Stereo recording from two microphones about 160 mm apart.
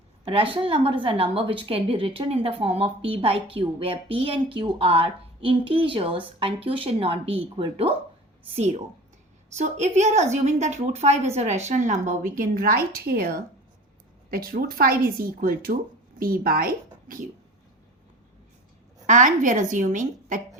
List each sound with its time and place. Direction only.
0.3 s a woman's voice: 35° right (ahead or behind); by 17.2 s 60° right (ahead or behind)
19.0 s a woman's voice: 50° right (ahead or behind)